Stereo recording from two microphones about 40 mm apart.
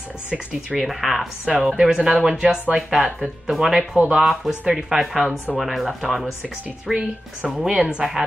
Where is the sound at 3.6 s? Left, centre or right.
Centre.